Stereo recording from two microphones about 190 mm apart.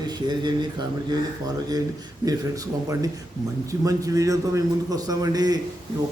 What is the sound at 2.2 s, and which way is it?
A man's voice, 20° right (ahead or behind).